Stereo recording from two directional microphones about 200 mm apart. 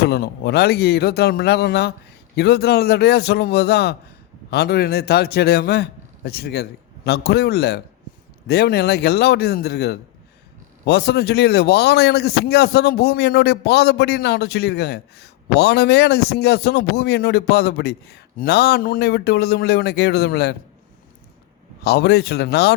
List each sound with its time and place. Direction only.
0.0 s a man's voice: 55° left (ahead or behind)
21.8 s a man's voice: 55° left (ahead or behind)